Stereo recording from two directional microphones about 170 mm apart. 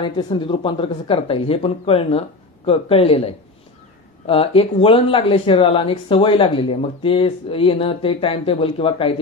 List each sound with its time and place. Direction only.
0.0 s speech: 30° left (ahead or behind)